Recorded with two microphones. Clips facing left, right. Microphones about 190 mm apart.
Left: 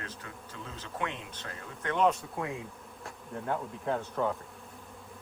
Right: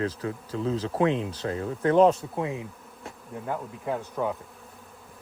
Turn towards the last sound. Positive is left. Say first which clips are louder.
# right 2 dB
turn(degrees=-10)  # may be behind; listen again after turning